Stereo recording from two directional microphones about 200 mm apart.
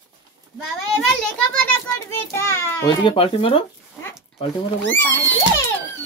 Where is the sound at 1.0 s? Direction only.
5° left (ahead or behind).